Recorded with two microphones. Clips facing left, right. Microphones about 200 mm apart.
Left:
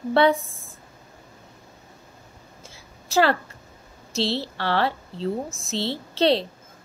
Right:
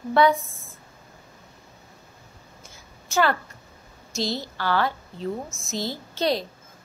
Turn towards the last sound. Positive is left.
turn(degrees=30)  # may be behind; listen again after turning